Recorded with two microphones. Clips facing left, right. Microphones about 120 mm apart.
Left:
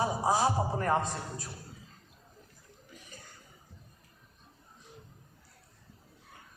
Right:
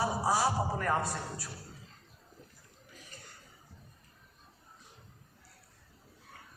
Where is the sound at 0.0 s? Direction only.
20° left (ahead or behind).